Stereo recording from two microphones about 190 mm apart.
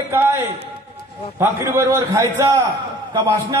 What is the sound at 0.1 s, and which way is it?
A man's voice, 10° right (ahead or behind).